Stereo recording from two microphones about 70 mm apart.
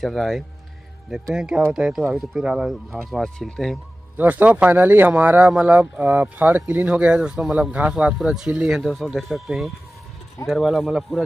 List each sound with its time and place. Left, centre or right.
0.0 s speech: centre
1.3 s speech: centre
4.2 s speech: right; by 11.2 s centre